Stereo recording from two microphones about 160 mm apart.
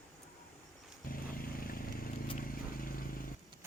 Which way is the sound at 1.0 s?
65° left (ahead or behind).